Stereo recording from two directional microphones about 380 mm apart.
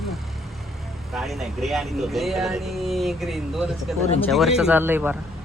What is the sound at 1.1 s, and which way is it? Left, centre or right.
Speech, centre.